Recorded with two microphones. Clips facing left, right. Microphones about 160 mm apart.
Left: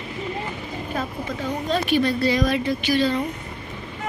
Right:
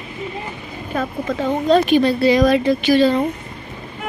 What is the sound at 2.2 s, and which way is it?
Speech, 90° right.